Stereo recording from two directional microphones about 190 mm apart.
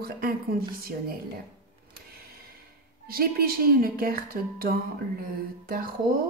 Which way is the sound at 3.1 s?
50° right (ahead or behind).